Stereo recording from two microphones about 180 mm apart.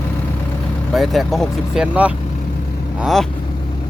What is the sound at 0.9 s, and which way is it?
Speech, centre (ahead or behind).